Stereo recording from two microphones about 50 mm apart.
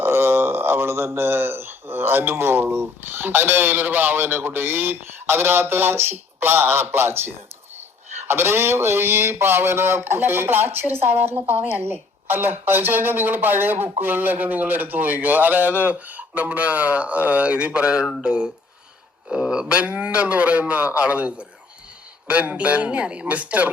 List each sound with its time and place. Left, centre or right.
0.0 s speech: right; by 19.8 s centre
19.8 s speech: right
22.5 s speech: right